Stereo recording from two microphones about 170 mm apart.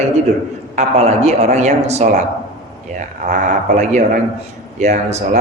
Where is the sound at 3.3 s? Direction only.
45° right (ahead or behind).